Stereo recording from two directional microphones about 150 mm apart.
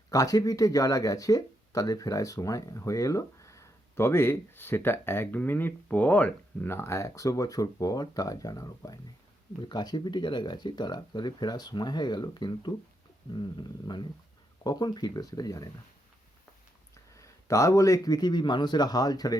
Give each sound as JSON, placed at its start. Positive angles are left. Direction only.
{"t": 0.1, "sound": "speech", "side_deg": 25}
{"t": 17.2, "sound": "speech", "side_deg": 20}